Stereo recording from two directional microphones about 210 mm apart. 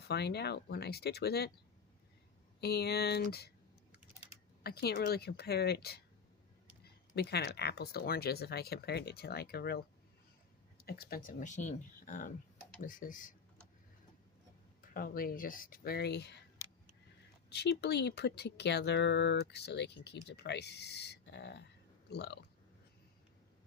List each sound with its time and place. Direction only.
0.1 s speech: 50° left (ahead or behind)
2.6 s speech: 50° left (ahead or behind)
4.6 s speech: 50° left (ahead or behind)
7.2 s speech: 50° left (ahead or behind)
14.8 s speech: 40° left (ahead or behind)
17.5 s speech: 50° left (ahead or behind)